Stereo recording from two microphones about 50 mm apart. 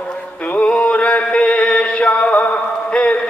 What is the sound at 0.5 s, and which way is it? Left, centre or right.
Music, left.